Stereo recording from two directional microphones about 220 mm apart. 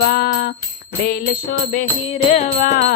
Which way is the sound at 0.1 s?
45° left (ahead or behind).